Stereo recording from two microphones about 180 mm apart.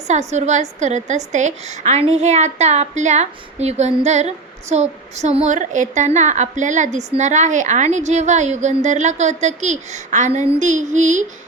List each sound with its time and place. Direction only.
0.1 s a woman's voice: 40° right (ahead or behind)